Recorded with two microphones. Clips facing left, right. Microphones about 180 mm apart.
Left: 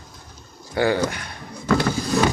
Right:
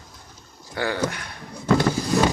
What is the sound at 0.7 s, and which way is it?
Speech, 10° left (ahead or behind).